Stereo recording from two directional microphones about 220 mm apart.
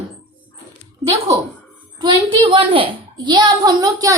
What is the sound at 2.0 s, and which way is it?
A child's voice, 20° right (ahead or behind).